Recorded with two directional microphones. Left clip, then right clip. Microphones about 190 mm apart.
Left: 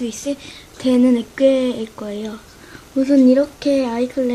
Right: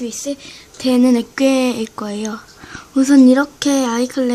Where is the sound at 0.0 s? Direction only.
Centre (ahead or behind).